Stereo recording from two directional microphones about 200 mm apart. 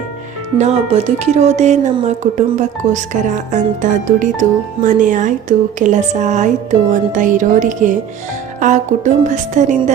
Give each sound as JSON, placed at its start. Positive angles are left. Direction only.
{"t": 0.6, "sound": "speech", "side_deg": -30}